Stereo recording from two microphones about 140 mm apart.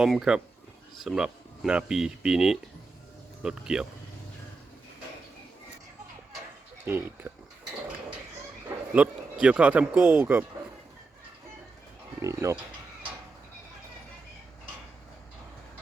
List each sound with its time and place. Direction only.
0.0 s speech: 5° right (ahead or behind)
6.8 s mechanisms: 15° right (ahead or behind)
8.9 s speech: 5° right (ahead or behind)
12.2 s speech: 20° right (ahead or behind)